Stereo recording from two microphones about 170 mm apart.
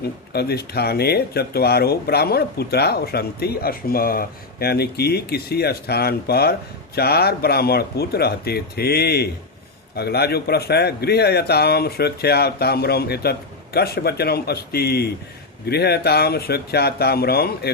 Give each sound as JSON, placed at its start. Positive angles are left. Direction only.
{"t": 0.0, "sound": "speech", "side_deg": 70}